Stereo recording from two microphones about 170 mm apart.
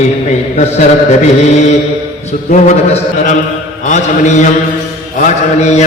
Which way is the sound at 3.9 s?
45° left (ahead or behind).